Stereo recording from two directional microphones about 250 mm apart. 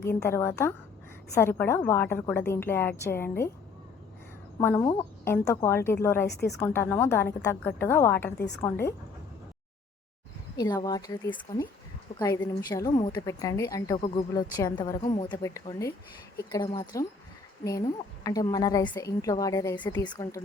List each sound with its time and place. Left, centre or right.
0.2 s a woman's voice: centre
4.6 s a woman's voice: centre
6.2 s a woman's voice: left
6.6 s a woman's voice: centre
10.6 s a woman's voice: centre
12.7 s a woman's voice: centre